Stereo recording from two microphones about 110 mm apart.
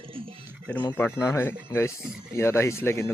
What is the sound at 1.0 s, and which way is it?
Speech, 25° left (ahead or behind).